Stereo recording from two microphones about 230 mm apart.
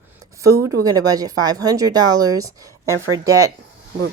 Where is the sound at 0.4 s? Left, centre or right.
Centre.